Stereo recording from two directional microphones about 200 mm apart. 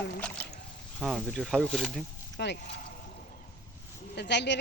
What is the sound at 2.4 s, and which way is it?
Speech, 55° left (ahead or behind).